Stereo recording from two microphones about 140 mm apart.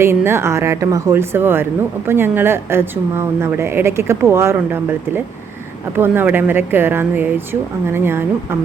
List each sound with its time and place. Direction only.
0.0 s a woman's voice: 15° right (ahead or behind)